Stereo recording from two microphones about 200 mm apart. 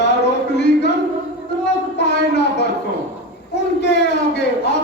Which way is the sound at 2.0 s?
60° left (ahead or behind).